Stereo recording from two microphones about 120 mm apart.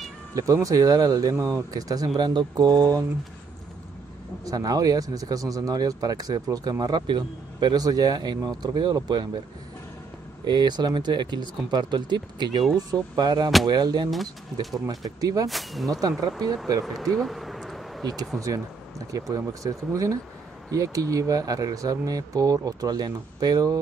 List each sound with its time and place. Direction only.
0.3 s speech: 30° right (ahead or behind)
4.5 s speech: 30° right (ahead or behind)
10.4 s speech: 40° right (ahead or behind)
14.1 s speech: centre (ahead or behind)
14.9 s speech: 30° right (ahead or behind)
15.4 s speech: centre (ahead or behind)
15.9 s speech: 30° right (ahead or behind)
16.8 s speech: centre (ahead or behind)
18.0 s speech: 35° right (ahead or behind)